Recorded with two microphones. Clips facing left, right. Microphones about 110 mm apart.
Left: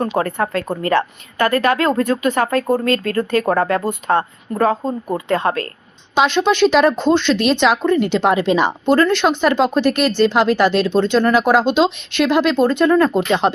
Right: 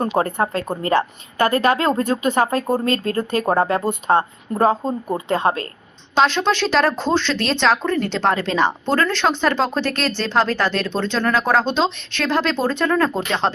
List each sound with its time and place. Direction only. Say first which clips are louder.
0.2 s speech: left 1 dB; 25° right (ahead or behind)
6.1 s speech: left 3 dB; 5° left (ahead or behind)